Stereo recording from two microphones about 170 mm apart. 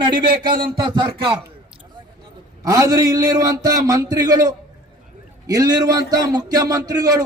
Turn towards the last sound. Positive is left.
turn(degrees=-20)  # may be behind; listen again after turning